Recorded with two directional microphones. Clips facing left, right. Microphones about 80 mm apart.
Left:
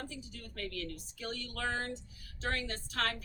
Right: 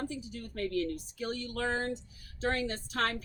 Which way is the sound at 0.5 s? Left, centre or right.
Right.